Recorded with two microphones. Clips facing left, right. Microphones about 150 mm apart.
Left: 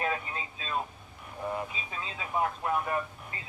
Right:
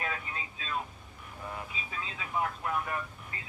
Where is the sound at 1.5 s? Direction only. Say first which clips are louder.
Left 6 dB; 30° left (ahead or behind).